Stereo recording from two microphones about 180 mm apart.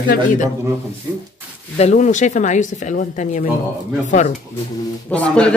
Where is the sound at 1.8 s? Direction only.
40° left (ahead or behind).